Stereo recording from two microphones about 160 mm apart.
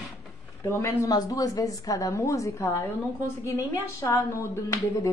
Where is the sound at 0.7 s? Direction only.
20° left (ahead or behind).